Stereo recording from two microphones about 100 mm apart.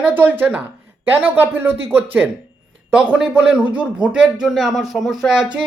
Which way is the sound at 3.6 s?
15° right (ahead or behind).